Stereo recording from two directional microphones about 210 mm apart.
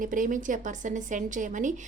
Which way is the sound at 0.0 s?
40° right (ahead or behind).